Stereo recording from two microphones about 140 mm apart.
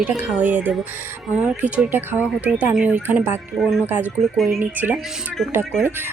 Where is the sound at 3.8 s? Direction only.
15° right (ahead or behind).